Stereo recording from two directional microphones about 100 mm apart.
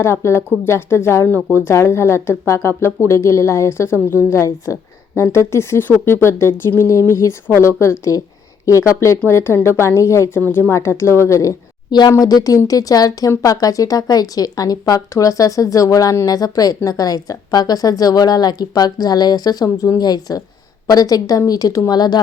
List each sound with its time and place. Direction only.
0.0 s speech: 30° left (ahead or behind)
11.9 s speech: 45° left (ahead or behind)
19.6 s speech: 30° left (ahead or behind)
20.0 s speech: 40° left (ahead or behind)